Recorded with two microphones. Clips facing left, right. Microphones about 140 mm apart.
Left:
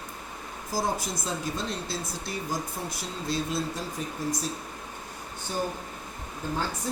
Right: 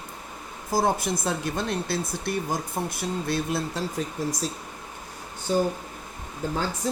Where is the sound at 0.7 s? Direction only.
60° right (ahead or behind).